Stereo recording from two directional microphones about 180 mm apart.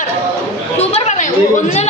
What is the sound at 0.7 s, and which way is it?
Speech, 40° left (ahead or behind).